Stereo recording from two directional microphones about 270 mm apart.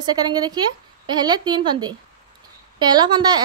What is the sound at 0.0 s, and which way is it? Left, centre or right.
Speech, centre.